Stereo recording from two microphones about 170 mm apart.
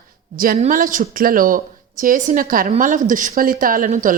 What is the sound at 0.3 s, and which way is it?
A woman's voice, 55° right (ahead or behind).